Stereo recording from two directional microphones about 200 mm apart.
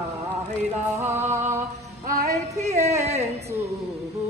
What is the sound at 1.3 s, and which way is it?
Music, 10° right (ahead or behind).